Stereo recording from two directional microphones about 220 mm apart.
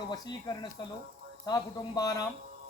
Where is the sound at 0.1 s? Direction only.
20° left (ahead or behind).